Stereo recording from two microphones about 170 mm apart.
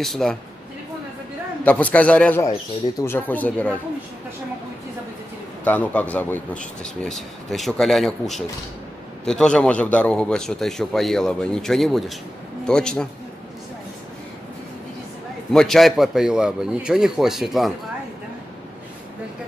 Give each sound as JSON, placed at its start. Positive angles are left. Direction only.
{"t": 0.0, "sound": "speech", "side_deg": 0}
{"t": 1.6, "sound": "a man's voice", "side_deg": 10}
{"t": 5.6, "sound": "speech", "side_deg": 10}
{"t": 15.5, "sound": "speech", "side_deg": 0}